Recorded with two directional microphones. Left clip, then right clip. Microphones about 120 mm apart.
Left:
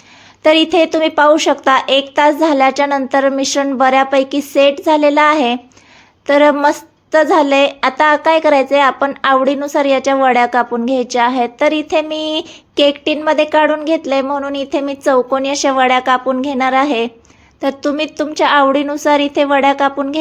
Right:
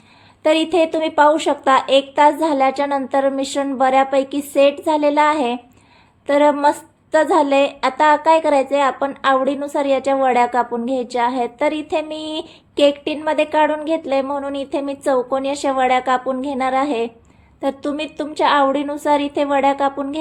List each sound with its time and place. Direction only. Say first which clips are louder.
0.4 s a woman's voice: left 5 dB; 25° left (ahead or behind)